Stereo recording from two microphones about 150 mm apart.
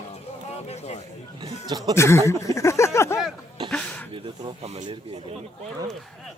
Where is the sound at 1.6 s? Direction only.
25° right (ahead or behind).